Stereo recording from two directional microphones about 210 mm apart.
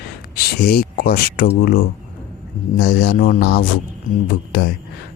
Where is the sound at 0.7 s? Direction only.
45° left (ahead or behind).